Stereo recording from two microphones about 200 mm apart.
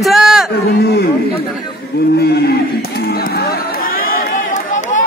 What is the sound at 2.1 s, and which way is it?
Chatter, 55° left (ahead or behind).